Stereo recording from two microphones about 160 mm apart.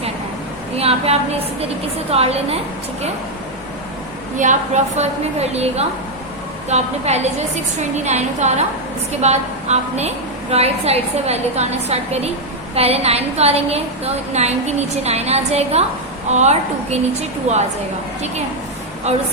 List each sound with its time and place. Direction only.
0.8 s a woman's voice: 40° right (ahead or behind)
4.4 s a woman's voice: 50° right (ahead or behind)
19.1 s a woman's voice: 45° right (ahead or behind)